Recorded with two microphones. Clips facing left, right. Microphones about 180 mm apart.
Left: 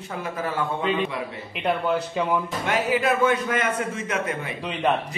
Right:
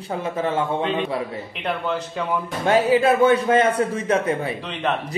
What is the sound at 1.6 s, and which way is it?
Speech, 10° left (ahead or behind).